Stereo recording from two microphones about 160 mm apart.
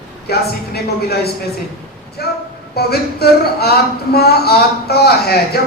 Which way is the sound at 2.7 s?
80° left.